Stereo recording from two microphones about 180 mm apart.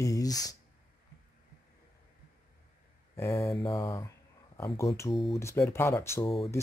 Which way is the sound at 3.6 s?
30° left (ahead or behind).